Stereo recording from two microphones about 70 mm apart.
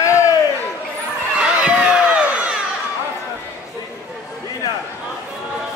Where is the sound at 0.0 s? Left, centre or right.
Left.